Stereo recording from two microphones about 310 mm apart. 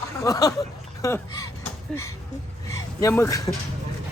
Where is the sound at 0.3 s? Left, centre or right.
Centre.